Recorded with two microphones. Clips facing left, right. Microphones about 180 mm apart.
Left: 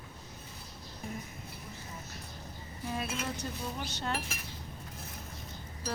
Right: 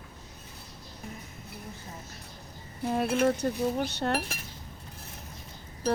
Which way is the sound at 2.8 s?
60° right (ahead or behind).